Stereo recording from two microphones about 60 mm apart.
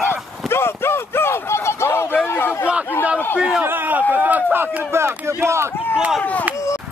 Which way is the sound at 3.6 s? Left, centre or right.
Right.